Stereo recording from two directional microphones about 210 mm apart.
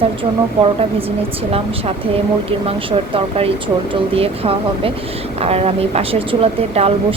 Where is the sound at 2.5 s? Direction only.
30° right (ahead or behind).